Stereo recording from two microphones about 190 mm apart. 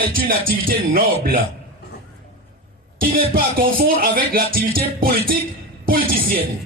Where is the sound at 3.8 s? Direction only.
50° right (ahead or behind).